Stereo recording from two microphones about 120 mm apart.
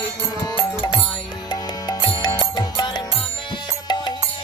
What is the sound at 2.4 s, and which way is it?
Music, 35° left (ahead or behind).